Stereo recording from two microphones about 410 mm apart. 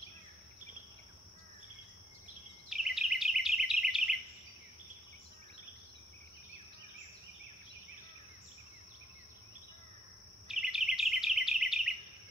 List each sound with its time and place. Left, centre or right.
2.7 s bird vocalization: centre
10.5 s insect: centre